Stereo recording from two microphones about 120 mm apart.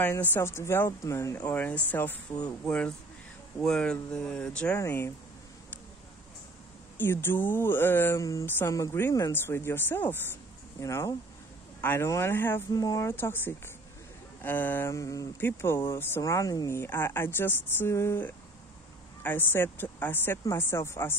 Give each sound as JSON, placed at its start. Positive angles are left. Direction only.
{"t": 0.0, "sound": "speech", "side_deg": 15}
{"t": 1.4, "sound": "speech", "side_deg": 15}
{"t": 3.6, "sound": "speech", "side_deg": 5}
{"t": 4.7, "sound": "speech", "side_deg": 25}
{"t": 7.0, "sound": "speech", "side_deg": 20}
{"t": 12.7, "sound": "speech", "side_deg": 30}